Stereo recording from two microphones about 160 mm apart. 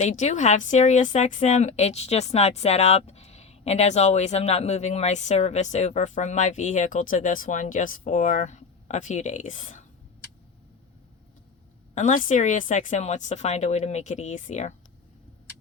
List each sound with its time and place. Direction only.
0.0 s a woman's voice: 45° left (ahead or behind)
11.9 s a woman's voice: 55° left (ahead or behind)